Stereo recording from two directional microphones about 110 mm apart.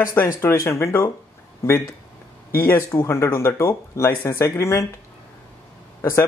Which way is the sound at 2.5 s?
25° left (ahead or behind).